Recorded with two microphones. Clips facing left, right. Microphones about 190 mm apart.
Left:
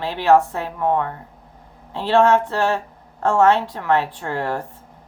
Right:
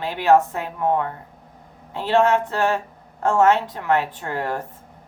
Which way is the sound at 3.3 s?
15° right (ahead or behind).